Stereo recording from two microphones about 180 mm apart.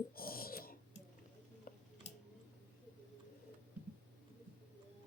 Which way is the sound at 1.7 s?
55° left (ahead or behind).